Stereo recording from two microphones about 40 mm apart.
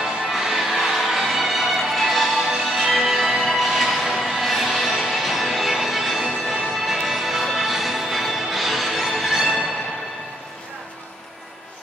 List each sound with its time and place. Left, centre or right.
0.0 s music: centre